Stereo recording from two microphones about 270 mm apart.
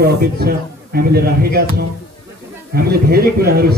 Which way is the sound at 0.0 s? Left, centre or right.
Right.